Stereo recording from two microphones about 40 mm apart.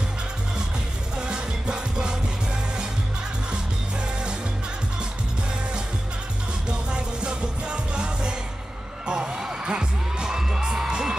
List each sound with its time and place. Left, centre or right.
1.2 s music: right
6.7 s music: right